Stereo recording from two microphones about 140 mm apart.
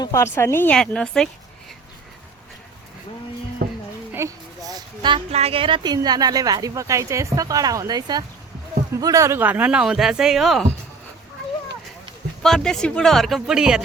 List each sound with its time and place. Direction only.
0.0 s speech: 20° left (ahead or behind)
0.8 s speech: 5° left (ahead or behind)
3.6 s a sound: 90° right
4.1 s a sound: 20° right (ahead or behind)
5.3 s speech: 45° right (ahead or behind); by 10.7 s centre (ahead or behind)
12.4 s speech: 5° left (ahead or behind)